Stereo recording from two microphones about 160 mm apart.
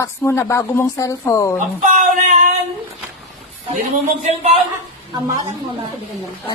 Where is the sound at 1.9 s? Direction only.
50° right (ahead or behind).